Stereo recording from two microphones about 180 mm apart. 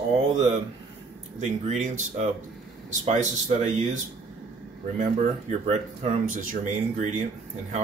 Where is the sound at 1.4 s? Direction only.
40° right (ahead or behind).